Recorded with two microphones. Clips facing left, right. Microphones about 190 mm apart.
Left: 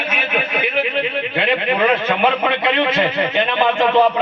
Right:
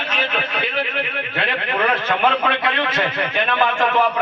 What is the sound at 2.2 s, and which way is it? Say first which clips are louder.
A man's voice: left 2 dB; 20° left (ahead or behind).